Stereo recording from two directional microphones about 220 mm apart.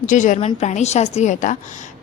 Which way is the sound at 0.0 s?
35° left (ahead or behind).